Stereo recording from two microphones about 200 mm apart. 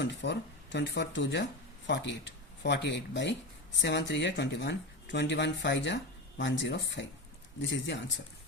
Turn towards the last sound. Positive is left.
turn(degrees=60)  # may be behind; listen again after turning